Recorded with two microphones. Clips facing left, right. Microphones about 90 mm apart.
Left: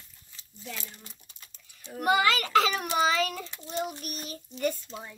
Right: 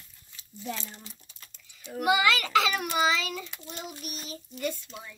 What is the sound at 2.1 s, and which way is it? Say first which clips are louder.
A child's voice: left 1 dB; 40° left (ahead or behind).